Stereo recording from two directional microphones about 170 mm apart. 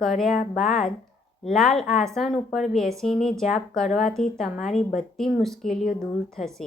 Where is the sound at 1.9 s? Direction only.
Centre (ahead or behind).